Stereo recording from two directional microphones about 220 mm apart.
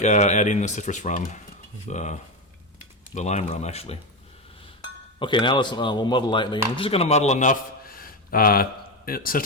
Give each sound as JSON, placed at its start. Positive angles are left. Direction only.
{"t": 0.0, "sound": "speech", "side_deg": 30}
{"t": 5.2, "sound": "a man's voice", "side_deg": 20}